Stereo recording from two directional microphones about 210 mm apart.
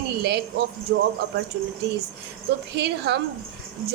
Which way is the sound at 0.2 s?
50° right (ahead or behind).